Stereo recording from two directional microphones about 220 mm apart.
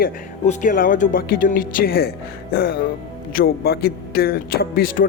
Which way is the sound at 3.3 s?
45° left (ahead or behind).